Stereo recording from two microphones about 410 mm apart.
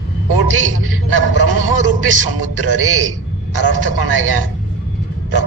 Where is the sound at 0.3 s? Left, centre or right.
Right.